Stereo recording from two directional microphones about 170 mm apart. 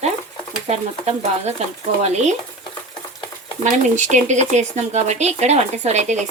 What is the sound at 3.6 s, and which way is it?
Speech, 45° right (ahead or behind).